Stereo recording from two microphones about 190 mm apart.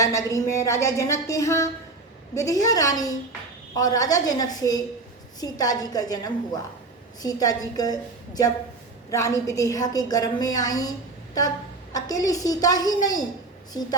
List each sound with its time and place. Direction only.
0.0 s a woman's voice: 15° left (ahead or behind)
11.9 s a woman's voice: 20° left (ahead or behind)